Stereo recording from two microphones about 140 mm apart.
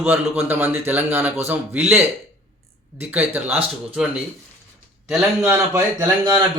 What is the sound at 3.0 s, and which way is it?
A man's voice, 10° right (ahead or behind).